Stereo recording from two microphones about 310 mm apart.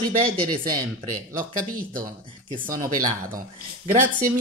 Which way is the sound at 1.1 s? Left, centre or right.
Right.